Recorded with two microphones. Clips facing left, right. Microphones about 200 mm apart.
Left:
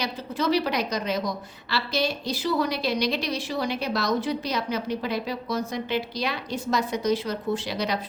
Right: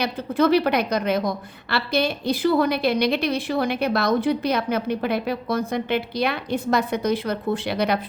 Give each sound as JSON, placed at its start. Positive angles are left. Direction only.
{"t": 0.0, "sound": "a woman's voice", "side_deg": -55}